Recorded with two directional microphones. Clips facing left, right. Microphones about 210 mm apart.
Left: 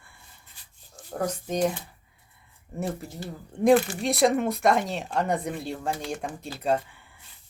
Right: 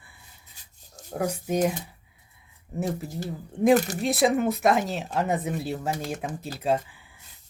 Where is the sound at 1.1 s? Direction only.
10° right (ahead or behind).